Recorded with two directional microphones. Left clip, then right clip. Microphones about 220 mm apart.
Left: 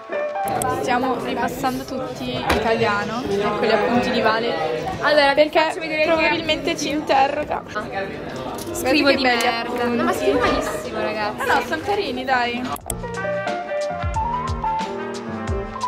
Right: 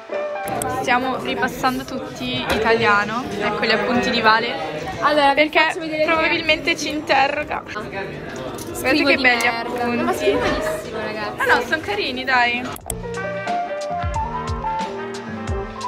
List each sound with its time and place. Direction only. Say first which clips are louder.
0.8 s speech: right 1 dB; 10° left (ahead or behind)
5.0 s a woman's voice: even; 25° right (ahead or behind)
5.4 s speech: even; 10° left (ahead or behind)
8.8 s a woman's voice: right 1 dB; centre (ahead or behind)
11.4 s speech: right 3 dB; 10° left (ahead or behind)